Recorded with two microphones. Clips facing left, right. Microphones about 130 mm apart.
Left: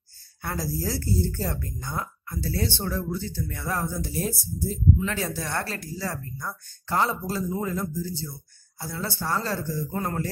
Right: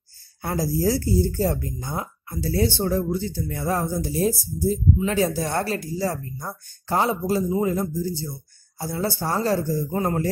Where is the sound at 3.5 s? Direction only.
25° right (ahead or behind).